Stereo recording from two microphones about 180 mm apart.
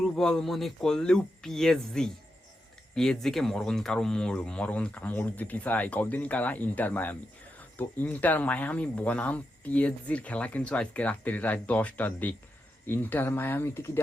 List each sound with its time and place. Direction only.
0.2 s speech: 5° left (ahead or behind)